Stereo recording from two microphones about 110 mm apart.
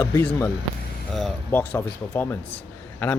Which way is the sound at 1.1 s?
Centre (ahead or behind).